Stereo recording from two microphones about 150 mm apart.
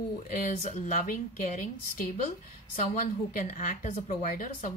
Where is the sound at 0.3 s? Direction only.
55° left (ahead or behind).